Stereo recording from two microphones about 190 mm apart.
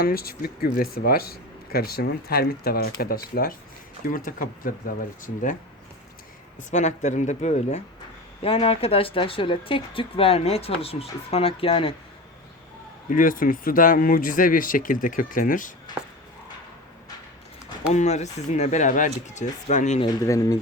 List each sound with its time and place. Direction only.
0.0 s speech: 50° left (ahead or behind)
4.1 s speech: 45° left (ahead or behind)
6.6 s speech: 40° left (ahead or behind)
13.1 s speech: 45° left (ahead or behind)
17.9 s speech: 35° left (ahead or behind)
20.0 s speech: 20° left (ahead or behind)